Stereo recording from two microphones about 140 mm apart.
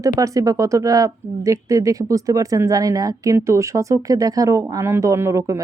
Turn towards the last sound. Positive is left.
turn(degrees=-20)  # may be behind; listen again after turning